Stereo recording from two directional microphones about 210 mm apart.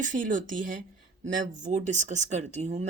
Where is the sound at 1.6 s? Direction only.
35° right (ahead or behind).